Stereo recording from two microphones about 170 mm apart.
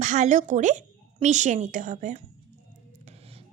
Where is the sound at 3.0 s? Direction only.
35° right (ahead or behind).